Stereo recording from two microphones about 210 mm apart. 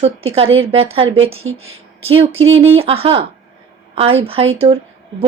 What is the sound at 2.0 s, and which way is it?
A woman's voice, 25° right (ahead or behind).